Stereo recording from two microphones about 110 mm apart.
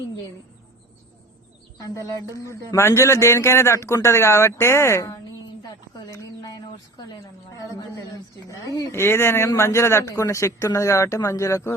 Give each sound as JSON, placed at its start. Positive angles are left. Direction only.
{"t": 2.4, "sound": "a man's voice", "side_deg": 25}
{"t": 6.1, "sound": "a sound", "side_deg": 35}
{"t": 7.7, "sound": "a woman's voice", "side_deg": 35}